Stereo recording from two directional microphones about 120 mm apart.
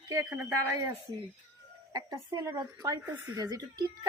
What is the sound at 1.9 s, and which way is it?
A woman's voice, 35° right (ahead or behind).